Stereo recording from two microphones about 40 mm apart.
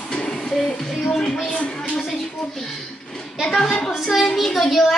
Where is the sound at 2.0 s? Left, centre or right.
Centre.